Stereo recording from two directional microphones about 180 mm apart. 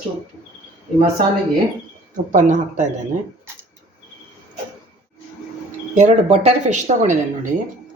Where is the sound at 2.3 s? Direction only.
45° right (ahead or behind).